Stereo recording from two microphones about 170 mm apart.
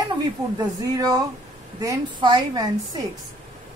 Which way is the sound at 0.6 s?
20° right (ahead or behind).